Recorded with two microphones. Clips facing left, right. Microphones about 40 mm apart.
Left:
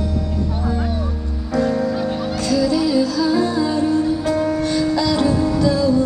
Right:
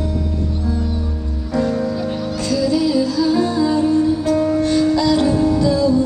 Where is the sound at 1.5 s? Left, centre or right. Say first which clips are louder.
Left 1 dB; centre.